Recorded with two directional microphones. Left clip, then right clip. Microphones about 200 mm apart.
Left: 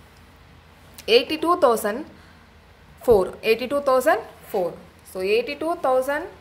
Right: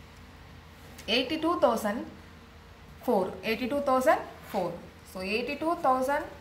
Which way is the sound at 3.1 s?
50° left (ahead or behind).